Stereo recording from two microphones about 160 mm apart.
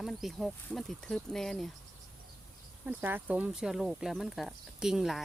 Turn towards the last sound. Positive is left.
turn(degrees=0)  # may be behind; listen again after turning